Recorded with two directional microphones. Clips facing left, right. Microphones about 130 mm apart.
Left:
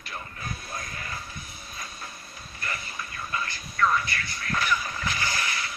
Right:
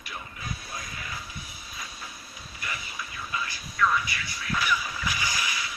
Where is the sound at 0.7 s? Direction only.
50° left (ahead or behind).